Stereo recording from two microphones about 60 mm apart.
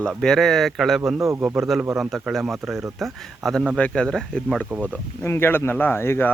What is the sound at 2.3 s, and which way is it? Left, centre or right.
Speech, centre.